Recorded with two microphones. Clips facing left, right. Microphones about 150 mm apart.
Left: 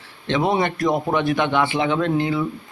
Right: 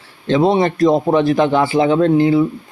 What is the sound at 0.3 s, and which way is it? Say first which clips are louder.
A man's voice: right 6 dB; 30° right (ahead or behind).